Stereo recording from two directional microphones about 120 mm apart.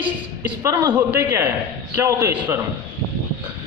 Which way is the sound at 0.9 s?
15° right (ahead or behind).